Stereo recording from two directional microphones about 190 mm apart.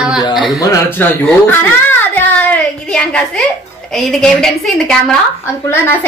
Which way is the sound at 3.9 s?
Centre (ahead or behind).